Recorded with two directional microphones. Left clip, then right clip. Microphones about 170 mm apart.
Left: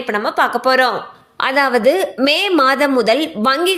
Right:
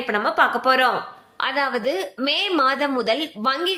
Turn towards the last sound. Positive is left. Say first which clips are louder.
# left 7 dB
turn(degrees=45)  # may be behind; listen again after turning